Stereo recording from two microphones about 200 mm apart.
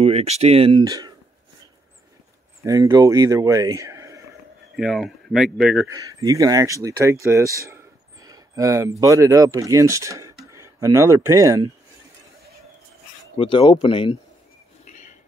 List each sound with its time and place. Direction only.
0.0 s speech: 30° right (ahead or behind)
2.6 s speech: 15° right (ahead or behind)
4.7 s speech: centre (ahead or behind)
5.9 s speech: 15° right (ahead or behind)
7.2 s a sound: 15° right (ahead or behind)
9.0 s speech: 15° right (ahead or behind)
13.4 s speech: 25° left (ahead or behind)
14.9 s a sound: 40° left (ahead or behind)